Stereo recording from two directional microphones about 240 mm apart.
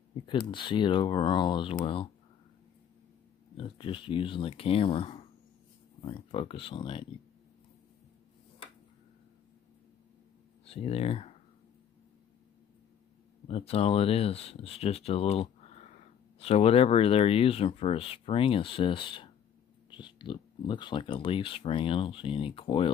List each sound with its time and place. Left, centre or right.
0.1 s speech: left
3.5 s speech: left
10.6 s speech: left
13.5 s speech: left